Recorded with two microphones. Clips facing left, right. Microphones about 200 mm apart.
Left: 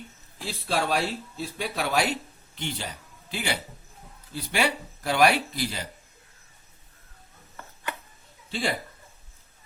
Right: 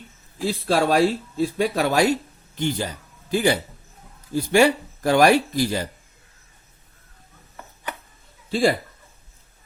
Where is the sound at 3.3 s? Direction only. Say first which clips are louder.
Right 11 dB; 45° right (ahead or behind).